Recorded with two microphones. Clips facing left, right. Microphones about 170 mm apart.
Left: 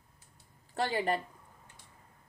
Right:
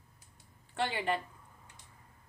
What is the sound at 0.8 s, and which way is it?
Speech, 40° left (ahead or behind).